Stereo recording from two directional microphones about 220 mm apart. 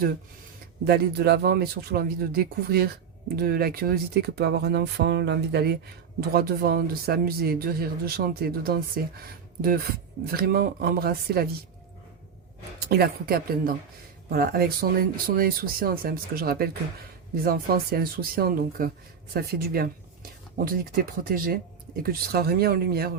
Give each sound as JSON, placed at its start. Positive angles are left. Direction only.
{"t": 0.9, "sound": "speech", "side_deg": -45}
{"t": 12.9, "sound": "speech", "side_deg": -45}